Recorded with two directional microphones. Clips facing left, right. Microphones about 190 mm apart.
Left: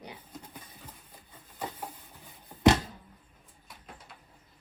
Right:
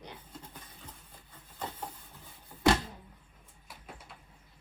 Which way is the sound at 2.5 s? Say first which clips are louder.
Left 3 dB; 25° left (ahead or behind).